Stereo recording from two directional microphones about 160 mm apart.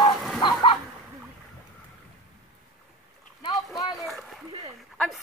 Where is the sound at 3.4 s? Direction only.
25° left (ahead or behind).